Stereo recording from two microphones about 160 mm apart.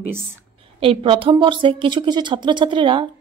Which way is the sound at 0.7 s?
35° right (ahead or behind).